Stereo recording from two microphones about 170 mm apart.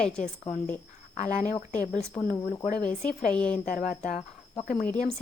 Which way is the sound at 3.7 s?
50° left (ahead or behind).